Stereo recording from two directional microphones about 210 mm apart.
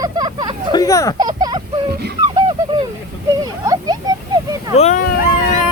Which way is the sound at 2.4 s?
20° right (ahead or behind).